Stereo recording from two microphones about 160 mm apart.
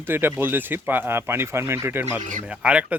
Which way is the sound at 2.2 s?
50° right (ahead or behind).